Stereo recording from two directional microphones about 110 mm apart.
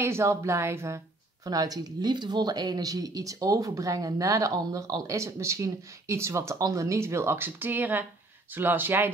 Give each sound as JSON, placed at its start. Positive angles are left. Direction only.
{"t": 0.0, "sound": "speech", "side_deg": -25}